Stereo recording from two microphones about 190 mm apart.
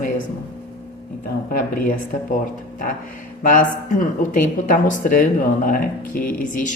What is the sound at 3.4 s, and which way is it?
Speech, 45° left (ahead or behind).